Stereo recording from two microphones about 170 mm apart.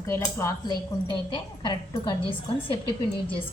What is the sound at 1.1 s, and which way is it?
A woman's voice, 25° left (ahead or behind).